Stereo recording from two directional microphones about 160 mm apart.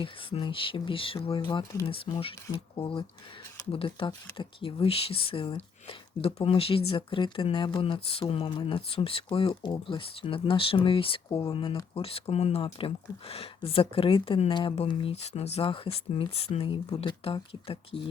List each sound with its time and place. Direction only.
0.0 s speech: 35° left (ahead or behind)